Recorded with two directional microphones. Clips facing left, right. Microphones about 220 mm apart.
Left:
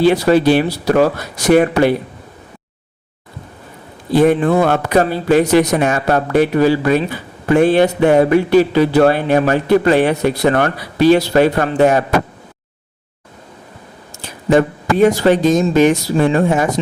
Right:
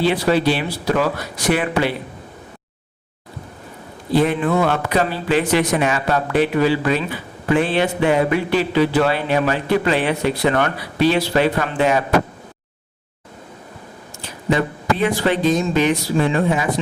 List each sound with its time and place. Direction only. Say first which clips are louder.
0.0 s speech: left 5 dB; 50° left (ahead or behind)
4.1 s speech: left 5 dB; 45° left (ahead or behind)
14.5 s speech: left 6 dB; 45° left (ahead or behind)